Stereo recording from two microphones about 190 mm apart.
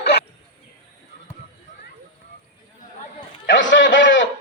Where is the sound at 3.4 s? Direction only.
75° left (ahead or behind).